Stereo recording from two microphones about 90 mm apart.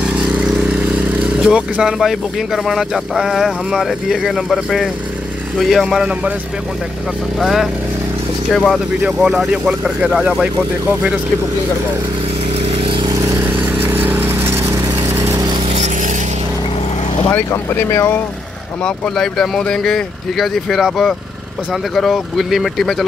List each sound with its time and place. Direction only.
0.1 s vehicle: 10° right (ahead or behind)
1.4 s speech: 10° right (ahead or behind)
7.3 s speech: 5° right (ahead or behind)
9.0 s speech: 5° right (ahead or behind)
12.8 s vehicle: 65° right (ahead or behind)
13.1 s vehicle: 40° right (ahead or behind)
13.4 s a sound: 25° right (ahead or behind)
17.3 s speech: 25° left (ahead or behind)
19.1 s speech: 5° left (ahead or behind)